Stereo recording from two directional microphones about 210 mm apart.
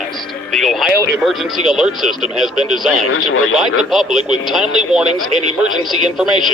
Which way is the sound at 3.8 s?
Centre (ahead or behind).